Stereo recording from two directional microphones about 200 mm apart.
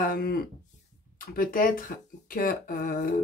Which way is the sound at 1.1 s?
45° left (ahead or behind).